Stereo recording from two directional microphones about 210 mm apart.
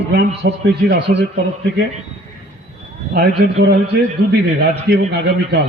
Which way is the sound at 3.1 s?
50° right (ahead or behind).